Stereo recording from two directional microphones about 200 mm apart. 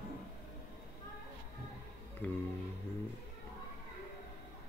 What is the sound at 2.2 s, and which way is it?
Speech, 10° left (ahead or behind).